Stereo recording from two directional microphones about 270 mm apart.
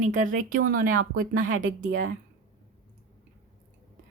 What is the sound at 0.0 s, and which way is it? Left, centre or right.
Speech, right.